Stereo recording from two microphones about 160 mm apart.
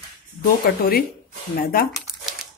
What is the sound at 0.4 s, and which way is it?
Speech, 70° left (ahead or behind).